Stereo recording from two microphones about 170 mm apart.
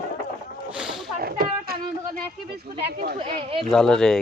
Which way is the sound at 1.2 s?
60° right (ahead or behind).